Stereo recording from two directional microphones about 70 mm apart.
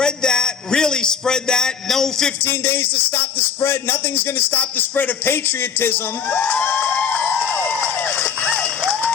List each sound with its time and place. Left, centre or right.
0.0 s a man's voice: centre
2.4 s music: left